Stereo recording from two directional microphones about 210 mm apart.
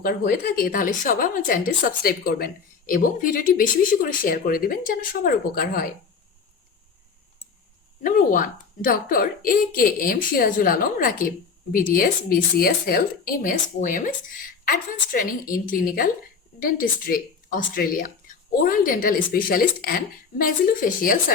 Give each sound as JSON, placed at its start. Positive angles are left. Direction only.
{"t": 0.0, "sound": "a woman's voice", "side_deg": 45}
{"t": 8.0, "sound": "a woman's voice", "side_deg": 40}